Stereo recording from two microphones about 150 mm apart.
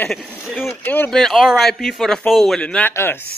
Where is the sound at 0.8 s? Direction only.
15° left (ahead or behind).